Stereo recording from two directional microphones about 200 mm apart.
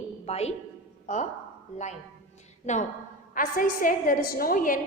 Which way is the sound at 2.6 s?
35° left (ahead or behind).